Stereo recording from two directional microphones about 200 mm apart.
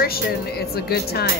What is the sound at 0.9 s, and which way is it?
Speech, 50° left (ahead or behind).